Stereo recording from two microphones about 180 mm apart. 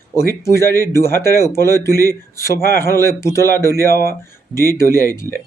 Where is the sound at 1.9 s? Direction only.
20° right (ahead or behind).